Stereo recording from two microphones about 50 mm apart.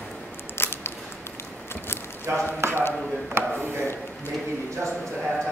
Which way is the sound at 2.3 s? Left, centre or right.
Right.